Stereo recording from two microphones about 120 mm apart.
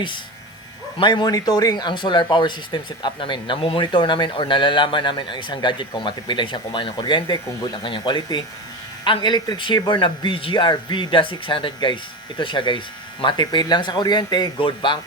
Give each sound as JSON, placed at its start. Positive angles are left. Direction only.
{"t": 0.9, "sound": "a man's voice", "side_deg": 40}